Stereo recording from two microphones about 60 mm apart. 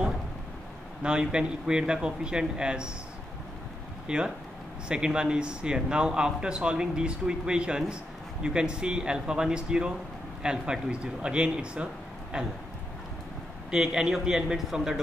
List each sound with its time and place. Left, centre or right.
1.0 s speech: centre
4.1 s speech: centre
13.7 s speech: centre